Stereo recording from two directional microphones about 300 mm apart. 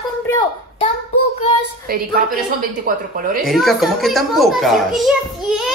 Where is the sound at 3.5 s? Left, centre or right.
Centre.